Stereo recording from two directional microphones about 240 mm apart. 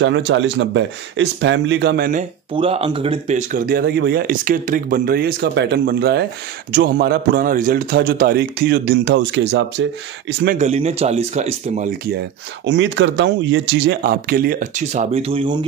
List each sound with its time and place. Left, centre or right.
0.0 s speech: right
2.5 s speech: right
10.4 s speech: right
12.2 s speech: right